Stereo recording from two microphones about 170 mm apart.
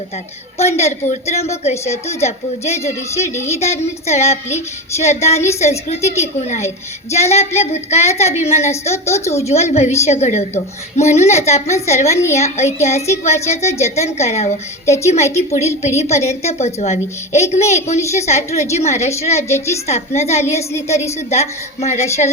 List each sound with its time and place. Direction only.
0.6 s a woman's voice: 40° left (ahead or behind)
19.5 s a woman's voice: 15° left (ahead or behind)
19.9 s a woman's voice: 40° left (ahead or behind)